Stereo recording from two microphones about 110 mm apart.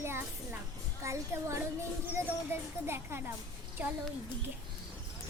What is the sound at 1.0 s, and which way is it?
Child singing, 25° right (ahead or behind).